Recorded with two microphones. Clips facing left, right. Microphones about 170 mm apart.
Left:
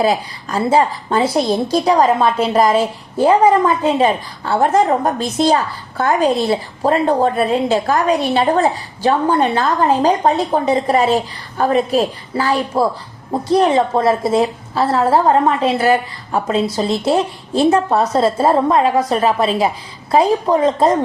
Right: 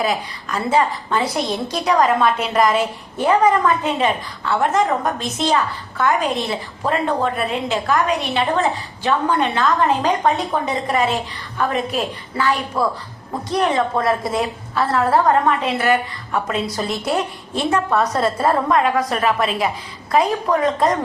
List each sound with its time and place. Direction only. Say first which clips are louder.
0.0 s a woman's voice: left 5 dB; 35° left (ahead or behind)